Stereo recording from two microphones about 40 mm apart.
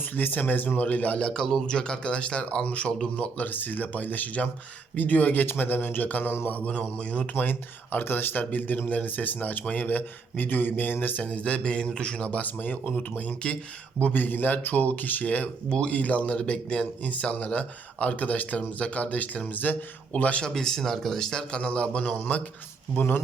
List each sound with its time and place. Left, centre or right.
0.0 s speech: left
0.8 s speech: left
1.2 s speech: left
3.4 s speech: left
6.9 s speech: left
7.3 s speech: left
11.3 s speech: left
12.4 s speech: left
16.4 s speech: left
19.5 s speech: left
20.1 s speech: left
20.5 s speech: centre
21.5 s speech: left
23.0 s speech: left